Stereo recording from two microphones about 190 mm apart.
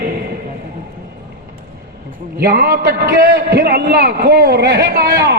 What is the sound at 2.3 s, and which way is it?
A man's voice, 50° right (ahead or behind).